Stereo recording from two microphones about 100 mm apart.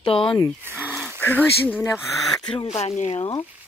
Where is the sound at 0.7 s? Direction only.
15° right (ahead or behind).